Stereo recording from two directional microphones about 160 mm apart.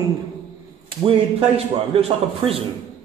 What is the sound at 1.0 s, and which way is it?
Speech, 35° right (ahead or behind).